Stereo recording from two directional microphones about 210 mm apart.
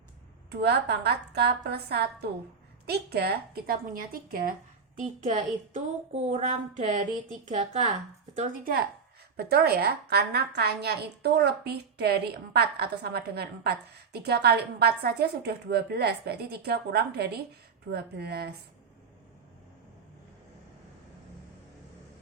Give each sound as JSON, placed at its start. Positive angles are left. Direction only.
{"t": 0.5, "sound": "a woman's voice", "side_deg": -50}